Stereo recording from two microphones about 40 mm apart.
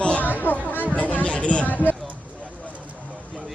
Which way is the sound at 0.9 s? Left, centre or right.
Left.